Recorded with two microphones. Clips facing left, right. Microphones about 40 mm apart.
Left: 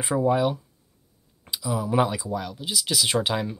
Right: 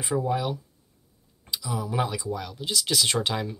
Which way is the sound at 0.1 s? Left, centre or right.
Centre.